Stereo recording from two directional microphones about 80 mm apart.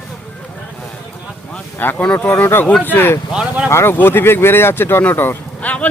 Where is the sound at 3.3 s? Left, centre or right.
Centre.